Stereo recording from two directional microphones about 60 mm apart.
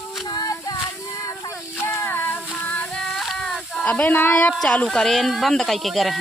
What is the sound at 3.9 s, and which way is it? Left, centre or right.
Speech, left.